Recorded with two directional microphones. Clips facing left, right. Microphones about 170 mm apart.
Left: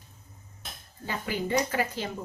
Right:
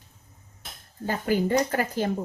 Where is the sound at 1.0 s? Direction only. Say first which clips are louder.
Right 7 dB; 45° right (ahead or behind).